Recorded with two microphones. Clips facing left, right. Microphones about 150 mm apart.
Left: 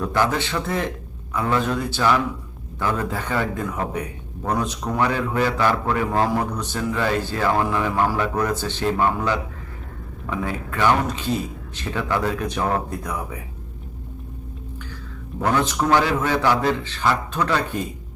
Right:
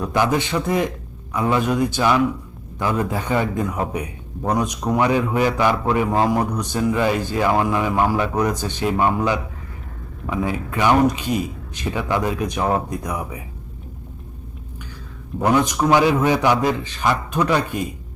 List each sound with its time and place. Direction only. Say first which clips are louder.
0.0 s a man's voice: right 2 dB; 15° right (ahead or behind)
15.4 s a man's voice: right 3 dB; 15° right (ahead or behind)